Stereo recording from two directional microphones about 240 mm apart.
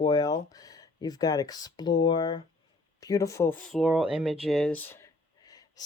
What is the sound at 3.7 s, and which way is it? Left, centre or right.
Speech, centre.